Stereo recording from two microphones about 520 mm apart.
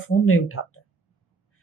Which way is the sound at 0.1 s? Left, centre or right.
Left.